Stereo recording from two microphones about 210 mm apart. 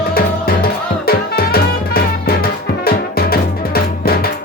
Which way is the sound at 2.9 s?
45° left (ahead or behind).